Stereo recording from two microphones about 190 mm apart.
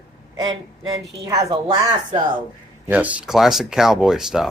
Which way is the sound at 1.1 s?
20° right (ahead or behind).